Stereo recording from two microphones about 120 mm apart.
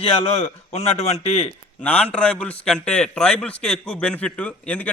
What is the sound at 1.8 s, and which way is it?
A man's voice, 10° left (ahead or behind).